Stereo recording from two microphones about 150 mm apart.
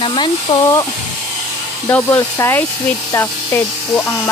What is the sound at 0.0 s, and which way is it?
Speech, 35° left (ahead or behind).